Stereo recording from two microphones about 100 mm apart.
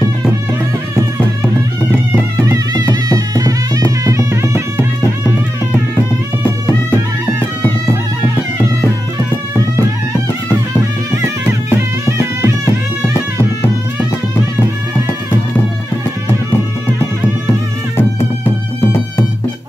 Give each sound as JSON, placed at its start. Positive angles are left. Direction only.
{"t": 2.4, "sound": "music", "side_deg": -40}
{"t": 6.4, "sound": "music", "side_deg": 15}
{"t": 10.8, "sound": "music", "side_deg": -25}
{"t": 13.1, "sound": "music", "side_deg": 25}
{"t": 17.9, "sound": "music", "side_deg": 20}